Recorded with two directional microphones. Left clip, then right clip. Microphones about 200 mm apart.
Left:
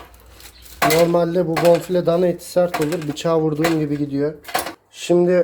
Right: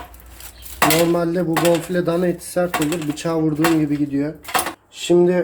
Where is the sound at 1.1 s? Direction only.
30° left (ahead or behind).